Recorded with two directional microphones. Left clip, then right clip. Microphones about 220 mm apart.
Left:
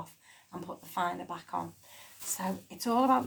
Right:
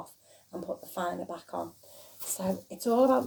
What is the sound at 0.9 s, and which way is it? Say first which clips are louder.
Speech: left 3 dB; 30° left (ahead or behind).